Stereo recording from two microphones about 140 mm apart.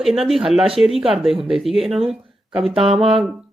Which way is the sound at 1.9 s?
45° right (ahead or behind).